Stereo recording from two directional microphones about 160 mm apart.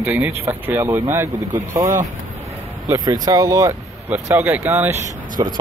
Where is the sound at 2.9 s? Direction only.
25° right (ahead or behind).